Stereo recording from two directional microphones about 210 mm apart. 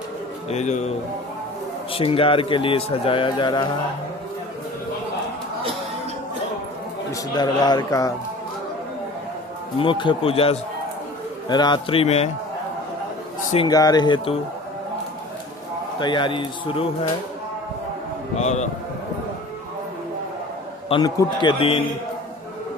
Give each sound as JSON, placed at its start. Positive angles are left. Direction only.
{"t": 0.4, "sound": "speech", "side_deg": 35}
{"t": 7.1, "sound": "speech", "side_deg": 20}
{"t": 9.7, "sound": "speech", "side_deg": 25}
{"t": 13.7, "sound": "speech", "side_deg": 15}
{"t": 16.0, "sound": "speech", "side_deg": 20}
{"t": 18.3, "sound": "speech", "side_deg": 35}
{"t": 20.9, "sound": "a man's voice", "side_deg": 20}